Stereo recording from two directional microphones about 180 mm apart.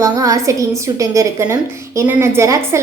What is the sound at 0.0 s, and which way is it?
A woman's voice, 20° right (ahead or behind).